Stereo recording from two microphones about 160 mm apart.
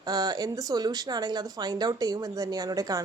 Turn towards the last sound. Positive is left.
turn(degrees=-20)  # may be behind; listen again after turning